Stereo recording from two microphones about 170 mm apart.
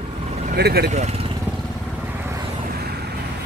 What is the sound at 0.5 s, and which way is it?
Speech, 70° right (ahead or behind).